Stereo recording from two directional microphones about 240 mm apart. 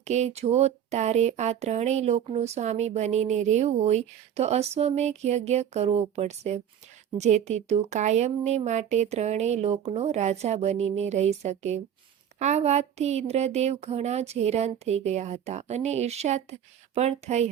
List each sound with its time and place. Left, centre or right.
0.0 s speech: right